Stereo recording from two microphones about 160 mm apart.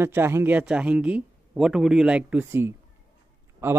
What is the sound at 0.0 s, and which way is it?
Speech, 15° right (ahead or behind).